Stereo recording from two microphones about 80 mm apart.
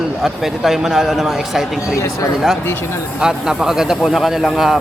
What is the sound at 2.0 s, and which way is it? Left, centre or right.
Speech, left.